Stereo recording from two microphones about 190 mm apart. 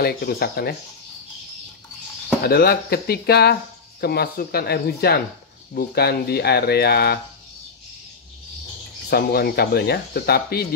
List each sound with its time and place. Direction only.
0.0 s speech: 55° left (ahead or behind)
2.4 s speech: 55° left (ahead or behind)
9.1 s speech: 55° left (ahead or behind)